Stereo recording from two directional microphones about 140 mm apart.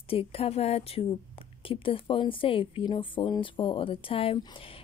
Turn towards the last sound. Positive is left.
turn(degrees=40)  # may be behind; listen again after turning